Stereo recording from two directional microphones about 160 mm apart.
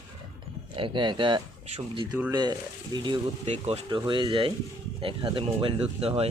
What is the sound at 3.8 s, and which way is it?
Speech, 30° right (ahead or behind).